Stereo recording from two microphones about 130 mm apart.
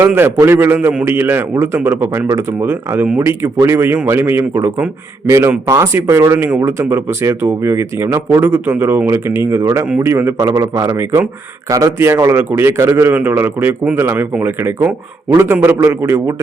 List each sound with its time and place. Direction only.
0.0 s a man's voice: 15° right (ahead or behind)